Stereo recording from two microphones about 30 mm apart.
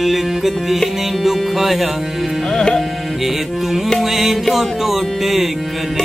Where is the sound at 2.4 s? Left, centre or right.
Centre.